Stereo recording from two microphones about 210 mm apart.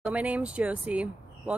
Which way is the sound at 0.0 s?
5° right (ahead or behind).